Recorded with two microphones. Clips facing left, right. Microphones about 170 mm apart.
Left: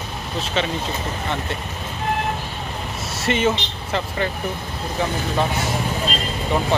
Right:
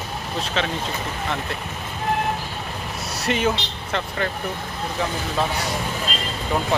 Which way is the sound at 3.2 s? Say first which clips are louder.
Left 2 dB; centre (ahead or behind).